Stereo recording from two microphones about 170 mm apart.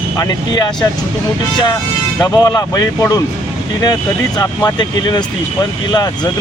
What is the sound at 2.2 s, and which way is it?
Speech, 20° left (ahead or behind).